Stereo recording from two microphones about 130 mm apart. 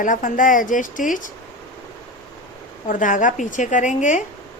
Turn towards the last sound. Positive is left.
turn(degrees=75)  # may be behind; listen again after turning